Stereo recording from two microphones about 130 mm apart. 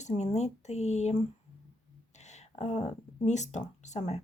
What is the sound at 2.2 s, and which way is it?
Speech, 60° left (ahead or behind).